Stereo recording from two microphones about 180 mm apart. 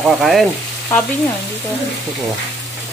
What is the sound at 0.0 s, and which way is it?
Speech, centre (ahead or behind).